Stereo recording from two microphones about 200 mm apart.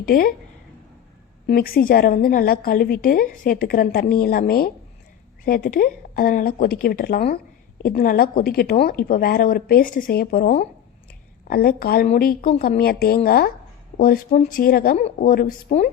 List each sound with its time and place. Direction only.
0.0 s a woman's voice: 45° left (ahead or behind)
1.5 s a woman's voice: 50° left (ahead or behind)